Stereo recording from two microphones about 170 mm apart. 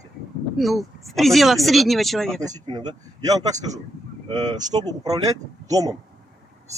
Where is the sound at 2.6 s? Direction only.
25° right (ahead or behind).